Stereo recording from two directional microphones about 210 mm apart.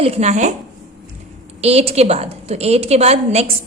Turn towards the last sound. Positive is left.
turn(degrees=-30)  # may be behind; listen again after turning